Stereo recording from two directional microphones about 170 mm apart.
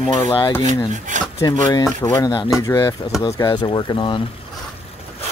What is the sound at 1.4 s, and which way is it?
Speech, 20° left (ahead or behind).